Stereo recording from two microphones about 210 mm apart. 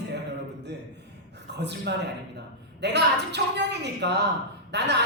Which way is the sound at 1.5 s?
55° right (ahead or behind).